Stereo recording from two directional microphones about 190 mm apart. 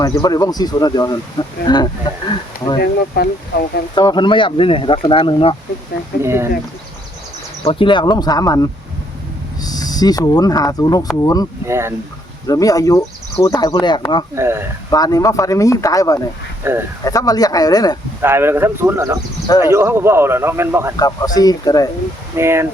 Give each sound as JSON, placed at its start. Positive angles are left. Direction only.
{"t": 0.0, "sound": "speech", "side_deg": 20}
{"t": 3.2, "sound": "speech", "side_deg": 55}
{"t": 3.9, "sound": "speech", "side_deg": 25}
{"t": 6.2, "sound": "speech", "side_deg": -15}
{"t": 7.6, "sound": "speech", "side_deg": 30}
{"t": 11.6, "sound": "speech", "side_deg": -15}
{"t": 12.5, "sound": "speech", "side_deg": 20}
{"t": 14.3, "sound": "speech", "side_deg": -15}
{"t": 14.8, "sound": "speech", "side_deg": 20}
{"t": 16.6, "sound": "speech", "side_deg": -10}
{"t": 17.0, "sound": "speech", "side_deg": 20}
{"t": 18.2, "sound": "speech", "side_deg": -10}
{"t": 21.0, "sound": "speech", "side_deg": 20}
{"t": 22.4, "sound": "speech", "side_deg": -15}